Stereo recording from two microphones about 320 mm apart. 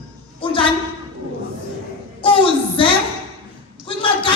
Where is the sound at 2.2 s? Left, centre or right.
Centre.